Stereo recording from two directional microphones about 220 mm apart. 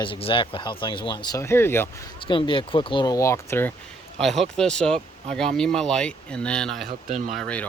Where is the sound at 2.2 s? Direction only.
25° left (ahead or behind).